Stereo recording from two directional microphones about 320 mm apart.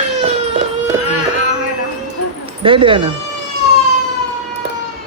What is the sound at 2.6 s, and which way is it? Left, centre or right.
Speech, centre.